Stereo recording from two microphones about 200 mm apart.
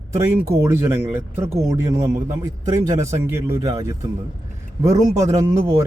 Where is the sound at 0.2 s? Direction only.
15° right (ahead or behind).